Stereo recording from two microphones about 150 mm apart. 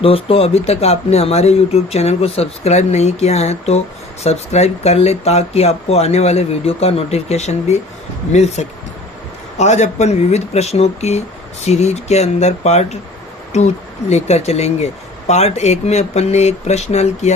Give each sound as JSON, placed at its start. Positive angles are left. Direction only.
{"t": 0.0, "sound": "speech", "side_deg": 40}